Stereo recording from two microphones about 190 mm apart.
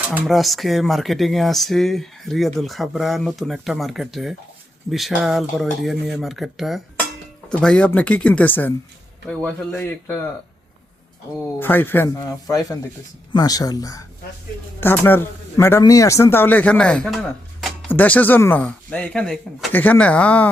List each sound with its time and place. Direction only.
0.1 s speech: 5° right (ahead or behind)
11.6 s speech: 10° left (ahead or behind)